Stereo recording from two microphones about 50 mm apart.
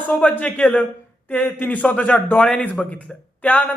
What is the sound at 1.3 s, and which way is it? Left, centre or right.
A woman's voice, left.